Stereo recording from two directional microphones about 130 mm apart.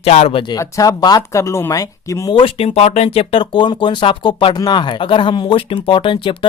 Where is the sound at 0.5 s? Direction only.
25° left (ahead or behind).